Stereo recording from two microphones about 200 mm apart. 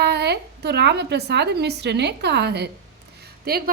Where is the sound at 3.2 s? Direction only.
50° right (ahead or behind).